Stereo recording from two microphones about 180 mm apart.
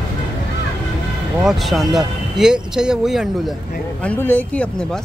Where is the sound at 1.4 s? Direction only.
Centre (ahead or behind).